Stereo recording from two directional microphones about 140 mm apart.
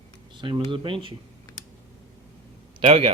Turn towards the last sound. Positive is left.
turn(degrees=-50)  # may be behind; listen again after turning